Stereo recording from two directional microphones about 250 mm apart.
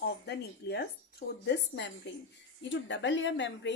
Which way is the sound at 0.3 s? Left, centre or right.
Left.